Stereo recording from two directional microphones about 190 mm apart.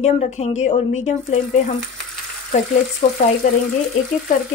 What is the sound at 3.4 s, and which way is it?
Speech, 45° left (ahead or behind).